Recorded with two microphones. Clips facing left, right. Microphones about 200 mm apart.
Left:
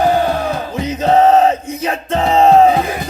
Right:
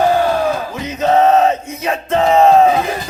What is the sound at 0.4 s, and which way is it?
Music, 30° left (ahead or behind).